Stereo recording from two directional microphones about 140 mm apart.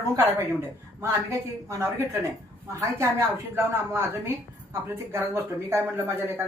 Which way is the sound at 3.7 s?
20° right (ahead or behind).